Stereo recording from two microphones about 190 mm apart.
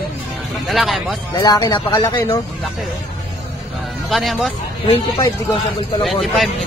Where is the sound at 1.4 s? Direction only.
25° left (ahead or behind).